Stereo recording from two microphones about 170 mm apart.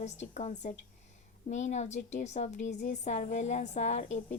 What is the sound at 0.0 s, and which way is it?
Speech, 40° left (ahead or behind).